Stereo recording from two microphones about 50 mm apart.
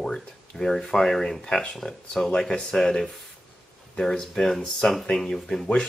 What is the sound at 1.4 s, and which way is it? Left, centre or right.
Speech, centre.